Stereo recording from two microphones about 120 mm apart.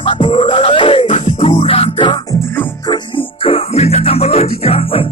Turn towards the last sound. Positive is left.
turn(degrees=55)  # may be behind; listen again after turning